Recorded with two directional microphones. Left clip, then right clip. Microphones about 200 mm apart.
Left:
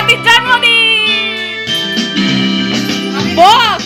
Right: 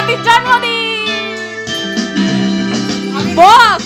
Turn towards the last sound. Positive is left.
turn(degrees=-10)  # may be behind; listen again after turning